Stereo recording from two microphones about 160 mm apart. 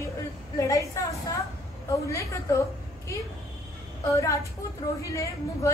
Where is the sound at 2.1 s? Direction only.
20° left (ahead or behind).